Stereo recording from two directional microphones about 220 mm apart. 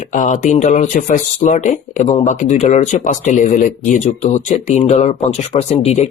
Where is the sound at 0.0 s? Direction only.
30° left (ahead or behind).